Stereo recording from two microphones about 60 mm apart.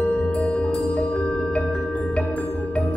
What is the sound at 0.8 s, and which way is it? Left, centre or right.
Music, centre.